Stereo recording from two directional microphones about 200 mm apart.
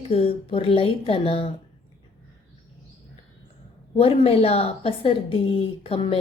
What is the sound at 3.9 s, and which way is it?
A woman's voice, 30° left (ahead or behind).